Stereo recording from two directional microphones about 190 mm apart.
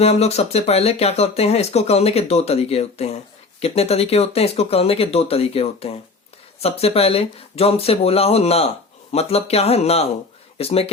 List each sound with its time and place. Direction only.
0.0 s speech: 35° left (ahead or behind)